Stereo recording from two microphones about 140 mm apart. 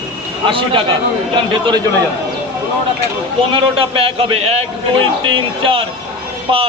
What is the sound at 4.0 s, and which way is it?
Speech, 40° right (ahead or behind).